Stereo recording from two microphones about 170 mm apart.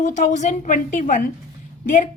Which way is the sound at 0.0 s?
45° left (ahead or behind).